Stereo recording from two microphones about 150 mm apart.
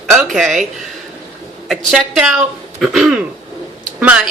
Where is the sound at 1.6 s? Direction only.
5° right (ahead or behind).